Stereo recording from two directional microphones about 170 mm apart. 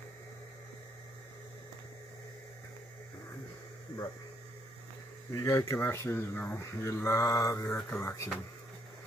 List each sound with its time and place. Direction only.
5.3 s speech: 15° left (ahead or behind)